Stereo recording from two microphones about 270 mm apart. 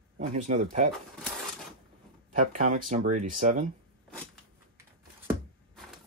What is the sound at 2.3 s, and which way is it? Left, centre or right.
Speech, right.